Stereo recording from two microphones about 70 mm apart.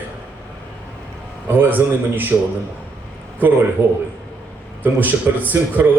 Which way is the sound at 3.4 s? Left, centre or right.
Right.